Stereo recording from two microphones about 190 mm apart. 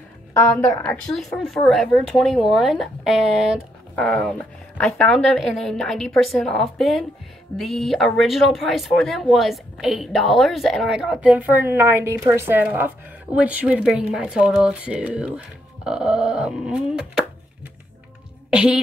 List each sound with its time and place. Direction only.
0.3 s a woman's voice: 10° left (ahead or behind)
1.1 s speech: centre (ahead or behind)
18.5 s speech: 5° right (ahead or behind)